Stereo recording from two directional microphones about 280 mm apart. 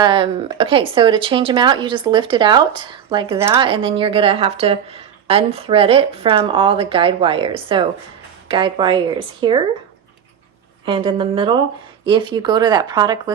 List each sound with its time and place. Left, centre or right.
0.0 s speech: centre
10.8 s speech: centre